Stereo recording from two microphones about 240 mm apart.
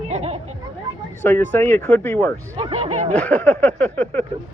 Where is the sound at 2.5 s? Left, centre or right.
Right.